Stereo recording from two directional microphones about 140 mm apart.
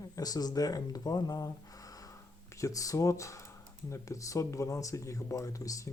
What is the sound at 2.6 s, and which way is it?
Speech, 25° left (ahead or behind).